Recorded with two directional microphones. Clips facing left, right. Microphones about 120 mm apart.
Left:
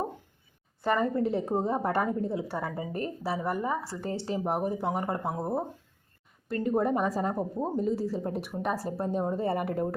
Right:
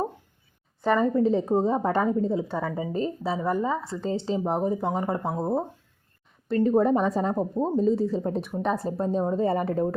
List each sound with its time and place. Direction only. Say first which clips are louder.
0.8 s a woman's voice: right 5 dB; 20° right (ahead or behind)
6.8 s a woman's voice: right 4 dB; 25° right (ahead or behind)